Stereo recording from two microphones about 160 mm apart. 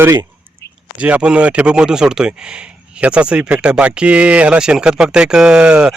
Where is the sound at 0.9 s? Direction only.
10° right (ahead or behind).